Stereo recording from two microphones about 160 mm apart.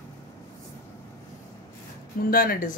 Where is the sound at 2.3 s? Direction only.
65° left (ahead or behind).